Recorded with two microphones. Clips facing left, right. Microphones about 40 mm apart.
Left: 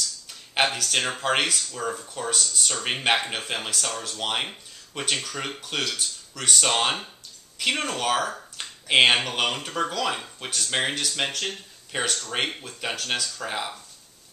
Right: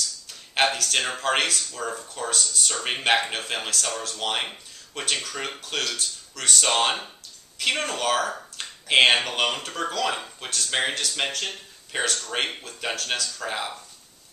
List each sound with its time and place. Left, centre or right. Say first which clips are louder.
0.7 s speech: even; centre
5.6 s speech: even; centre